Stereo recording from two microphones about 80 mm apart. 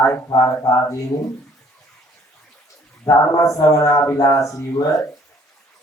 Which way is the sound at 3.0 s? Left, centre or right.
Left.